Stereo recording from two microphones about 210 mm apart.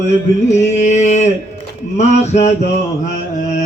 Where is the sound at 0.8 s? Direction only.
35° left (ahead or behind).